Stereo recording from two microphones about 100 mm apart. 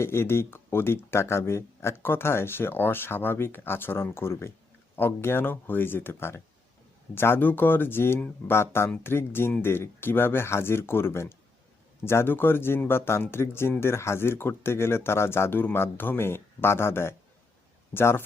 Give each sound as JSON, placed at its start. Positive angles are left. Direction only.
{"t": 0.0, "sound": "speech", "side_deg": 25}